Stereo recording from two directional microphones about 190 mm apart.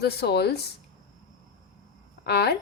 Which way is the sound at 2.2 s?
60° left (ahead or behind).